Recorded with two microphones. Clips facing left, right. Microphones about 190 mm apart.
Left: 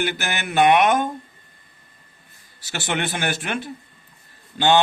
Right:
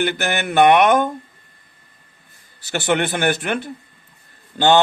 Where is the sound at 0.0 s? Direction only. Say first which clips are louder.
Right 5 dB; 55° right (ahead or behind).